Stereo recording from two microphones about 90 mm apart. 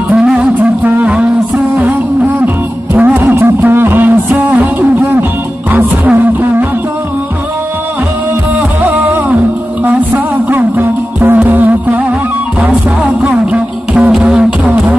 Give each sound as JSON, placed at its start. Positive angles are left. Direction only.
{"t": 0.1, "sound": "music", "side_deg": -10}
{"t": 2.4, "sound": "music", "side_deg": -20}
{"t": 8.8, "sound": "music", "side_deg": -20}
{"t": 13.3, "sound": "beatboxing", "side_deg": -15}